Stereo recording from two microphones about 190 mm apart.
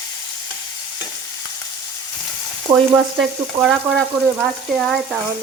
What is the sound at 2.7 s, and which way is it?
Frying, 20° right (ahead or behind).